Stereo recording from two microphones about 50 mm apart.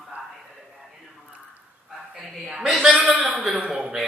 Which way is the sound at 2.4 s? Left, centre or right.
Centre.